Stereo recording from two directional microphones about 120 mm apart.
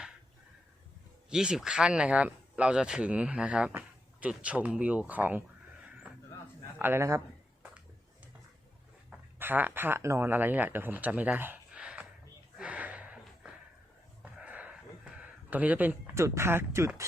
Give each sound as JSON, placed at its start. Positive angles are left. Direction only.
{"t": 1.3, "sound": "speech", "side_deg": -5}
{"t": 6.7, "sound": "speech", "side_deg": -20}
{"t": 9.0, "sound": "speech", "side_deg": -15}
{"t": 12.5, "sound": "a sound", "side_deg": -10}